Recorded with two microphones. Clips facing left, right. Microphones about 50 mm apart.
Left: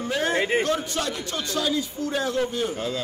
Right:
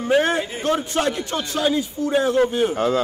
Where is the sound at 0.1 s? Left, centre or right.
Right.